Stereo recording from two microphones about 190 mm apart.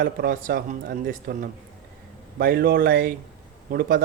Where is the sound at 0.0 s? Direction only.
50° right (ahead or behind).